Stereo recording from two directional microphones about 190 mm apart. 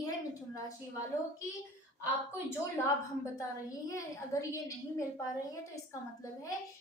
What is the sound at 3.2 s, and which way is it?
A woman's voice, 15° left (ahead or behind).